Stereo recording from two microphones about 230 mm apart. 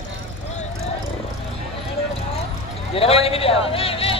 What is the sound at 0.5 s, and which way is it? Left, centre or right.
Vehicle, left.